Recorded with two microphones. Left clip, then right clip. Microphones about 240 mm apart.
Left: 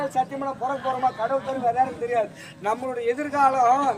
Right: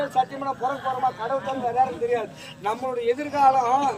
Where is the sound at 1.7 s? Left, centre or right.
Centre.